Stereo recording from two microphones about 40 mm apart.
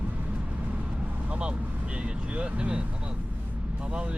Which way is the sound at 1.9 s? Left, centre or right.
Right.